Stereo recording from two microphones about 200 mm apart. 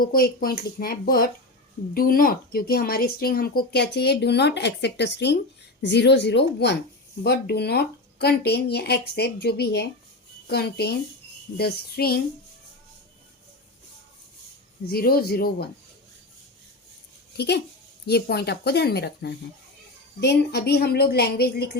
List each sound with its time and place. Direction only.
0.0 s speech: 50° left (ahead or behind)
14.8 s speech: 50° left (ahead or behind)
17.3 s speech: 55° left (ahead or behind)